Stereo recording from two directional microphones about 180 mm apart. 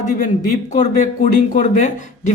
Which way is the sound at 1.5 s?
45° left (ahead or behind).